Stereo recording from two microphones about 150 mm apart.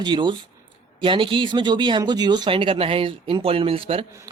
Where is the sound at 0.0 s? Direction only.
30° right (ahead or behind).